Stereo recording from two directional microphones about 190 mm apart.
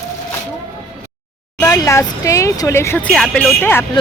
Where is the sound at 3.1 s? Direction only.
Centre (ahead or behind).